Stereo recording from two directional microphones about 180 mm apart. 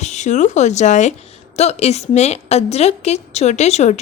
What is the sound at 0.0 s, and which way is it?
A woman's voice, 40° left (ahead or behind).